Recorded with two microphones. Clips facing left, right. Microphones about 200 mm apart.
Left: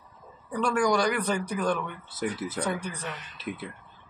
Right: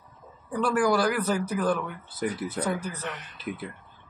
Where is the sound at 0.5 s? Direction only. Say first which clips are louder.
Right 1 dB; 5° right (ahead or behind).